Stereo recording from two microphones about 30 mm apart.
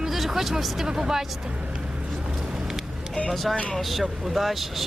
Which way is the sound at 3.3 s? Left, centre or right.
Centre.